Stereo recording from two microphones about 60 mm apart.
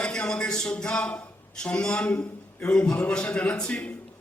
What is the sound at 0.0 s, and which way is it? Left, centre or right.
A man's voice, centre.